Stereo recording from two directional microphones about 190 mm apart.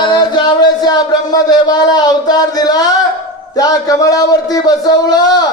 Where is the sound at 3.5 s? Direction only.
20° left (ahead or behind).